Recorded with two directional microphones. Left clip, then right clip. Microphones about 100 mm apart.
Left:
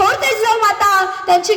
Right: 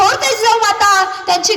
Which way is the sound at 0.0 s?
40° left (ahead or behind).